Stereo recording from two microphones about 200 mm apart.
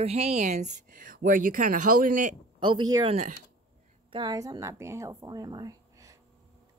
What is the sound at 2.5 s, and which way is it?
A woman's voice, 25° right (ahead or behind).